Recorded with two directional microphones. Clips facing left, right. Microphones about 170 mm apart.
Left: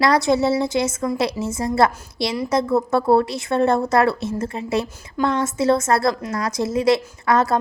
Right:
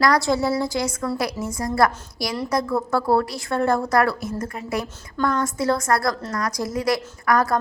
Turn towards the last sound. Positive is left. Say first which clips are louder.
# left 2 dB
turn(degrees=25)  # may be behind; listen again after turning